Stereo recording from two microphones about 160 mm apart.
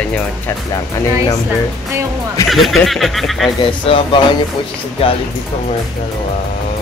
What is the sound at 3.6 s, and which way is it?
Speech, 30° left (ahead or behind).